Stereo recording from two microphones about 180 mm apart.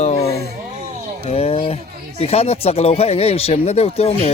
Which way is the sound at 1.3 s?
30° left (ahead or behind).